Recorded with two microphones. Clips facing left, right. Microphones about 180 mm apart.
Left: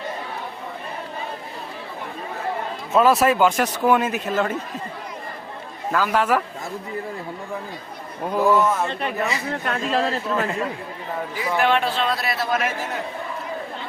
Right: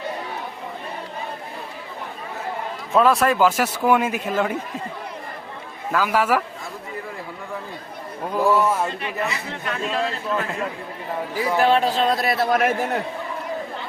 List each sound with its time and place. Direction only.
2.9 s a man's voice: 5° left (ahead or behind)
5.9 s a man's voice: 5° right (ahead or behind)
8.4 s speech: centre (ahead or behind)
8.6 s a man's voice: 10° right (ahead or behind)
9.5 s speech: 50° left (ahead or behind)
9.9 s a man's voice: 40° left (ahead or behind)
11.3 s a man's voice: 35° right (ahead or behind); by 13.0 s 55° right (ahead or behind)